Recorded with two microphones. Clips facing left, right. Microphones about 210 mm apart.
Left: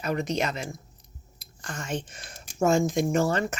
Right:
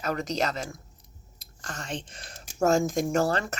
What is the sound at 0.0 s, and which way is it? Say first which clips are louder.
Speech: left 1 dB; 40° right (ahead or behind).